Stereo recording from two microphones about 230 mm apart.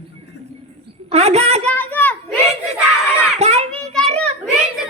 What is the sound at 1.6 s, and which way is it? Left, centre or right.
Children playing, centre.